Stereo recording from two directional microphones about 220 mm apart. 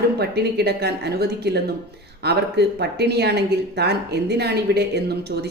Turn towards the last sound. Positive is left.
turn(degrees=-50)  # may be behind; listen again after turning